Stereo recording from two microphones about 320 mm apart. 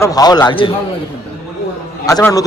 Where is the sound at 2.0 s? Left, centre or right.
Centre.